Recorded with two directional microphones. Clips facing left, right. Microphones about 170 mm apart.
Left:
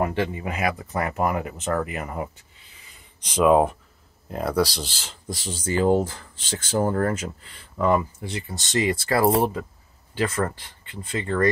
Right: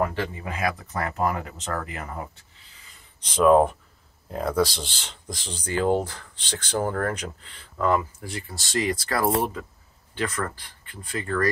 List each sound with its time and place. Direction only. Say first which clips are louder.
0.0 s speech: left 2 dB; 20° left (ahead or behind)
3.3 s speech: even; 10° left (ahead or behind)